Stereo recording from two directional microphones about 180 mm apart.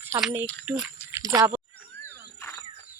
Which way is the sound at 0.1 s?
20° right (ahead or behind).